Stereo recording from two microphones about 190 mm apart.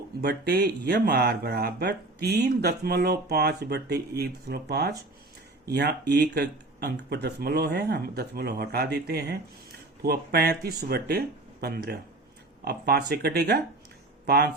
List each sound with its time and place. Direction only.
0.2 s speech: 55° right (ahead or behind)